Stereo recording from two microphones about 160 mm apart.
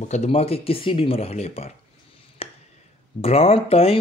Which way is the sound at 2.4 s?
40° left (ahead or behind).